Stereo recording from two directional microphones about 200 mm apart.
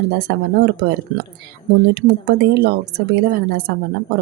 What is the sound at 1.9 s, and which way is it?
A woman's voice, 55° right (ahead or behind).